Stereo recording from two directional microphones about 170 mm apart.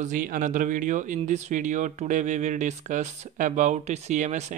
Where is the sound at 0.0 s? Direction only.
50° right (ahead or behind).